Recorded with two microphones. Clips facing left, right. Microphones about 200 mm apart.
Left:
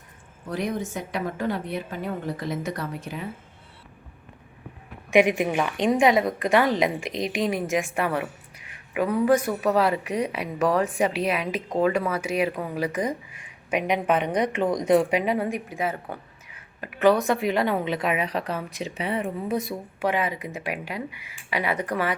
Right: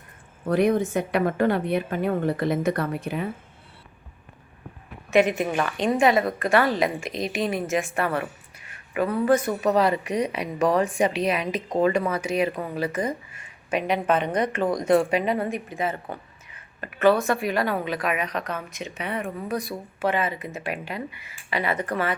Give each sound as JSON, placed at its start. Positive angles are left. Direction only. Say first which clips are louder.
{"t": 0.4, "sound": "a woman's voice", "louder": "right 8 dB", "side_deg": -60}
{"t": 5.1, "sound": "speech", "louder": "left 1 dB", "side_deg": 15}
{"t": 20.0, "sound": "speech", "louder": "right 1 dB", "side_deg": 15}